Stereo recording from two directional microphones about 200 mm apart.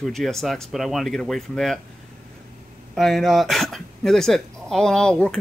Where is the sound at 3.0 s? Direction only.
Centre (ahead or behind).